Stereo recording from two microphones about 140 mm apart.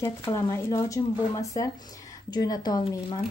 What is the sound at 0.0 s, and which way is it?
A woman's voice, 20° left (ahead or behind).